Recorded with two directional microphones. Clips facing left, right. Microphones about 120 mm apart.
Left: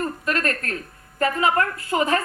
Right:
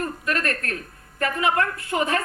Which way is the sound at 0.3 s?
30° left (ahead or behind).